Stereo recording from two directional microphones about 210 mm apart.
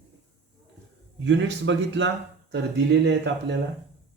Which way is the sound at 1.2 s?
60° right (ahead or behind).